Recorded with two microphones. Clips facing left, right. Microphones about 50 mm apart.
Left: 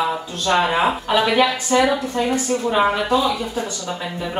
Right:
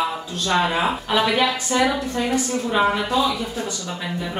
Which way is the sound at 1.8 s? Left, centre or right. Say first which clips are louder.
Left 2 dB; centre.